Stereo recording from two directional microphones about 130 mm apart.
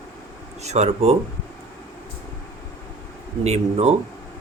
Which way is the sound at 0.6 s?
60° right (ahead or behind).